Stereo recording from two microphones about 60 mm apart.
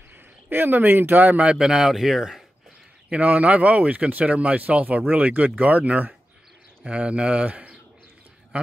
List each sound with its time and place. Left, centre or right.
0.5 s speech: right
1.4 s speech: centre
3.1 s speech: right